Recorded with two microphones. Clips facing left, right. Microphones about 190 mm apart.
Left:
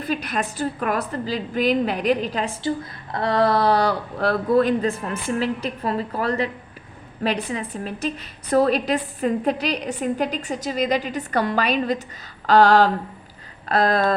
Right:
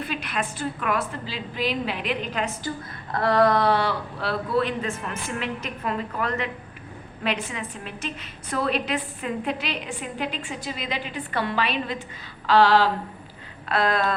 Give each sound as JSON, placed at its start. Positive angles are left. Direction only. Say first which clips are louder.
{"t": 0.0, "sound": "a woman's voice", "louder": "left 4 dB", "side_deg": 40}
{"t": 12.5, "sound": "a sound", "louder": "left 3 dB", "side_deg": 45}
{"t": 13.7, "sound": "a woman's voice", "louder": "left 4 dB", "side_deg": 40}